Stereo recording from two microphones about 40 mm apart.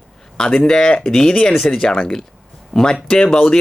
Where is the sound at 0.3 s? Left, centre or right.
Centre.